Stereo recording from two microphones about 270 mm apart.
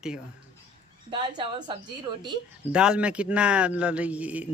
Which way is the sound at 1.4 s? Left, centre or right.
Centre.